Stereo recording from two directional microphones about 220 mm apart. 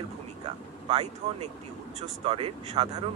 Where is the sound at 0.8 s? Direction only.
25° right (ahead or behind).